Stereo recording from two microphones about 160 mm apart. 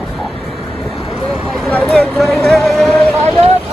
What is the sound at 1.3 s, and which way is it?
Speech, centre (ahead or behind).